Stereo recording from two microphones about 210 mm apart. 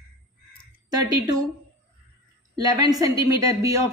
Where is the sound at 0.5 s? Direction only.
20° right (ahead or behind).